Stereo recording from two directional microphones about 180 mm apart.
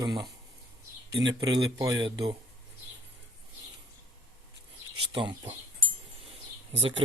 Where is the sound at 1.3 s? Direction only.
20° right (ahead or behind).